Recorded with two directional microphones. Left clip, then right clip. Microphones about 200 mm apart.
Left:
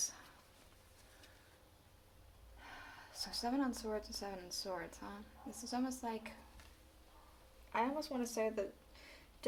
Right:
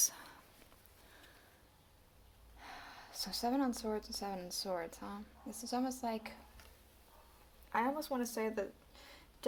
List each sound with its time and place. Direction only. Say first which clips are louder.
0.0 s whispering: right 7 dB; 55° right (ahead or behind)
2.6 s speech: right 2 dB; 35° right (ahead or behind)
7.7 s speech: right 2 dB; 25° right (ahead or behind)